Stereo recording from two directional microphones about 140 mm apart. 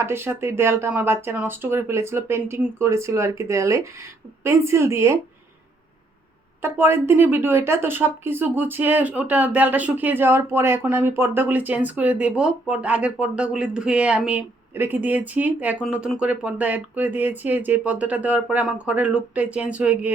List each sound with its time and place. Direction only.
0.0 s speech: 15° right (ahead or behind)
6.6 s speech: 15° right (ahead or behind)